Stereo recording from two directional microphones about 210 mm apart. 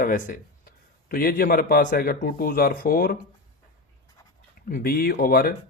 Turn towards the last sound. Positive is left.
turn(degrees=45)  # may be behind; listen again after turning